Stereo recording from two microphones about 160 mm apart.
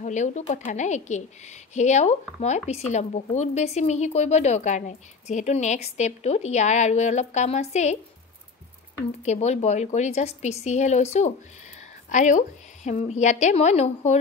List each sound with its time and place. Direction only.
0.0 s speech: 50° left (ahead or behind)
9.2 s speech: 45° left (ahead or behind)
12.1 s speech: 50° left (ahead or behind)